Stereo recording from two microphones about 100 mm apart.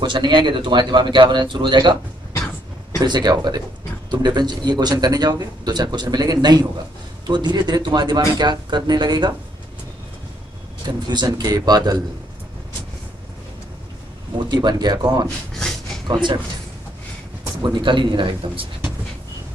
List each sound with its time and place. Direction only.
0.0 s a man's voice: 50° right (ahead or behind)
3.0 s a man's voice: 45° right (ahead or behind)
10.9 s a man's voice: 45° right (ahead or behind)
14.5 s a man's voice: 45° right (ahead or behind)
17.6 s speech: 45° right (ahead or behind)